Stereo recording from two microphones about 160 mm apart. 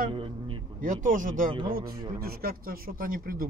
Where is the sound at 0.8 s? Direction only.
55° right (ahead or behind).